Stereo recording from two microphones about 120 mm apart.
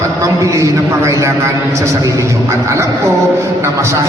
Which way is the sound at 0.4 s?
25° right (ahead or behind).